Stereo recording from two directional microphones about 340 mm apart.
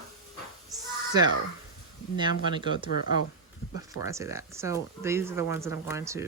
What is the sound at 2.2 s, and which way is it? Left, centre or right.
Speech, centre.